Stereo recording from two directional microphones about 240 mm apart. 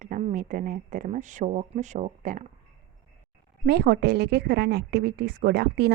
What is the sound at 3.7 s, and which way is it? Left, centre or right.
Speech, right.